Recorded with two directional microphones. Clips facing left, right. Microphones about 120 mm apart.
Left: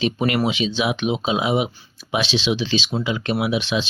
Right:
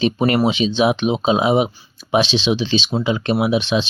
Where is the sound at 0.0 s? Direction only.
35° right (ahead or behind).